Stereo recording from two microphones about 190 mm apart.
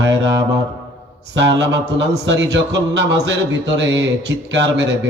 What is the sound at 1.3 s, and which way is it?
Speech, 65° right (ahead or behind).